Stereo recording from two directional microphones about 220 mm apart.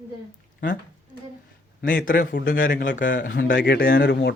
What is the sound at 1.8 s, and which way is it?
Speech, 40° left (ahead or behind).